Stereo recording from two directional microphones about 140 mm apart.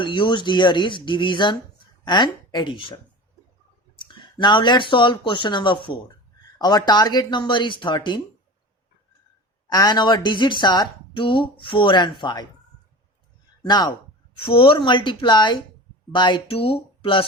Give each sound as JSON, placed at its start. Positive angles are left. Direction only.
{"t": 0.0, "sound": "a woman's voice", "side_deg": 35}
{"t": 3.9, "sound": "a woman's voice", "side_deg": 35}
{"t": 9.6, "sound": "a woman's voice", "side_deg": 30}
{"t": 13.7, "sound": "a woman's voice", "side_deg": 30}